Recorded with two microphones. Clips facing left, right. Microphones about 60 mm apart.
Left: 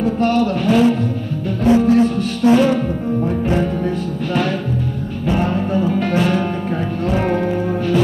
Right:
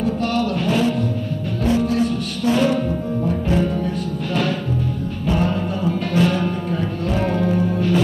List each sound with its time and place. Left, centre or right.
0.2 s mantra: left
1.6 s music: left
5.2 s music: left